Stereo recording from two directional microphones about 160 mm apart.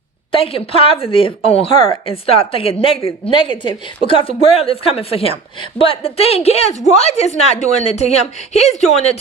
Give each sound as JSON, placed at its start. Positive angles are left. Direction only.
{"t": 0.3, "sound": "a woman's voice", "side_deg": 35}